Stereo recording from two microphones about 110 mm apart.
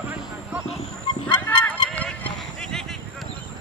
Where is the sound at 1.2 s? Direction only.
15° left (ahead or behind).